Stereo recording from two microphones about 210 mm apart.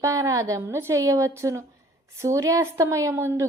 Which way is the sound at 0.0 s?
15° right (ahead or behind).